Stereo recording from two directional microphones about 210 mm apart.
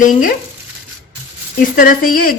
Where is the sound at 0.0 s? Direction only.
40° left (ahead or behind).